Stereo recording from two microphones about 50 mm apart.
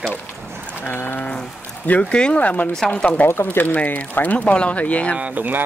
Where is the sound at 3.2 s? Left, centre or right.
Left.